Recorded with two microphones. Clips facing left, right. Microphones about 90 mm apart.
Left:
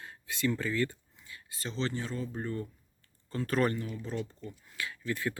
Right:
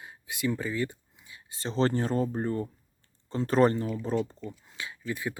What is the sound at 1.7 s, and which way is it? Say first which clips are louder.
Speech: right 9 dB; 45° right (ahead or behind).